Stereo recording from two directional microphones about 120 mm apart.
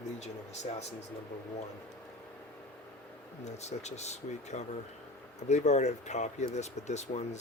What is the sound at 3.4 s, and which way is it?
Speech, 70° left (ahead or behind).